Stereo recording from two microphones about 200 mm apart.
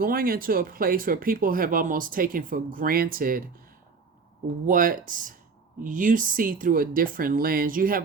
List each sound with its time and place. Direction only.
0.0 s speech: 45° right (ahead or behind)
4.6 s speech: 45° right (ahead or behind)